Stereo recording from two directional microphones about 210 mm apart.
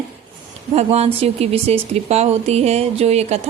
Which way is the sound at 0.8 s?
30° right (ahead or behind).